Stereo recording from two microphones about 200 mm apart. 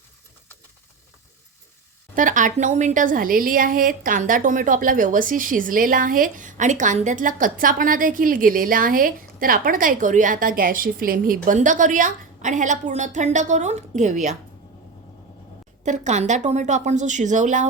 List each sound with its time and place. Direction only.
2.1 s a woman's voice: 40° right (ahead or behind)
15.8 s a woman's voice: 35° right (ahead or behind)